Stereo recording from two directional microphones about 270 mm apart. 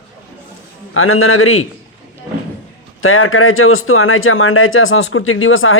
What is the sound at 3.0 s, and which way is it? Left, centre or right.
Speech, left.